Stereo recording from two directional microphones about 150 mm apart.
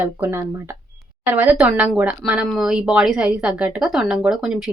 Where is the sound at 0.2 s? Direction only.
15° right (ahead or behind).